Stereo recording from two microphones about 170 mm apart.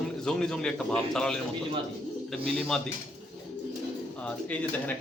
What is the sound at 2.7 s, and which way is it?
Speech, 5° left (ahead or behind).